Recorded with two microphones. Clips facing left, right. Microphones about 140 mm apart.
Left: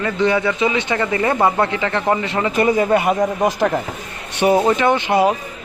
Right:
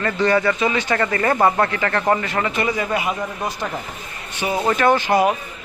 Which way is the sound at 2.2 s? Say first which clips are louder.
Left 2 dB; 25° left (ahead or behind).